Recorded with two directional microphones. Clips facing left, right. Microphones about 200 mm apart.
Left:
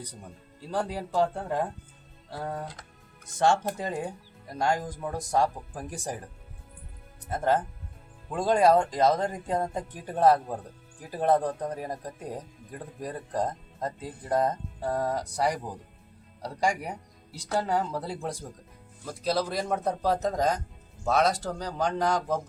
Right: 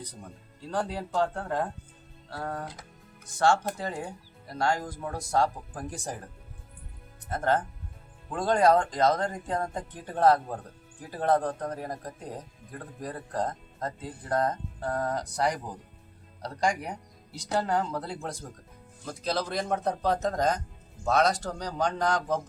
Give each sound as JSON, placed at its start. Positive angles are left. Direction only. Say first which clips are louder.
{"t": 0.7, "sound": "speech", "louder": "left 1 dB", "side_deg": 10}
{"t": 3.3, "sound": "speech", "louder": "even", "side_deg": 20}
{"t": 7.3, "sound": "speech", "louder": "left 1 dB", "side_deg": 10}